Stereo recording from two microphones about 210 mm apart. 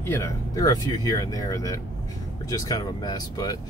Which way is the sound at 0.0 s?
15° left (ahead or behind).